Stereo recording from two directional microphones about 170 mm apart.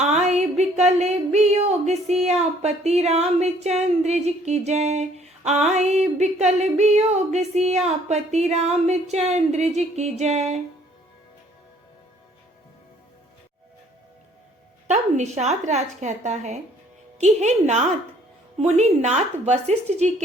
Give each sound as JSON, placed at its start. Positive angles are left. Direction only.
{"t": 0.0, "sound": "a sound", "side_deg": -40}
{"t": 1.9, "sound": "speech", "side_deg": -40}
{"t": 14.8, "sound": "a woman's voice", "side_deg": -40}